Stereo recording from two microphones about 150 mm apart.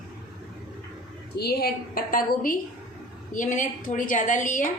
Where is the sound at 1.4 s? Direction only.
90° left; by 4.4 s 60° left (ahead or behind).